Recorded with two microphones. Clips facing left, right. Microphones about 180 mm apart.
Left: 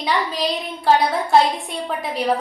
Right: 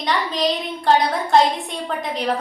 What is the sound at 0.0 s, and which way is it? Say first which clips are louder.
A child's voice: right 1 dB; 5° left (ahead or behind).